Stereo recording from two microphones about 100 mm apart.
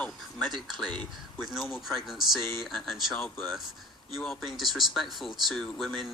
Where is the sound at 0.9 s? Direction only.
10° left (ahead or behind).